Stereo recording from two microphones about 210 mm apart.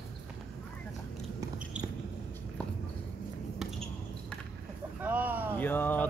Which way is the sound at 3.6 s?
Centre (ahead or behind).